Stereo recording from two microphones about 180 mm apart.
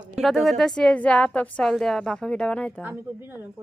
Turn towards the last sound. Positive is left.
turn(degrees=-10)  # may be behind; listen again after turning